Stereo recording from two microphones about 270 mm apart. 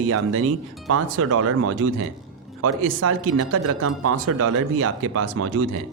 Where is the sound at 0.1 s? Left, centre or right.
Right.